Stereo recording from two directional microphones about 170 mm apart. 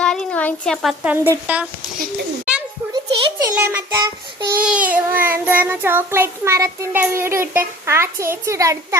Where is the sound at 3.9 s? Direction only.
25° right (ahead or behind).